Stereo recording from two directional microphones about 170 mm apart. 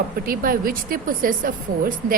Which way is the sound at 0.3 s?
60° right (ahead or behind).